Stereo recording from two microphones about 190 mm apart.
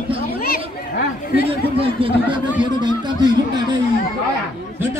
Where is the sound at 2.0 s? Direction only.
30° right (ahead or behind).